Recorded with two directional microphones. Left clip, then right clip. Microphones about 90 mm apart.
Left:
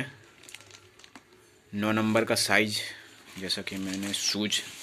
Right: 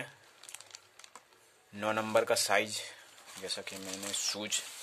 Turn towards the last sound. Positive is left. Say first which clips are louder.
# left 7 dB
turn(degrees=-25)  # may be behind; listen again after turning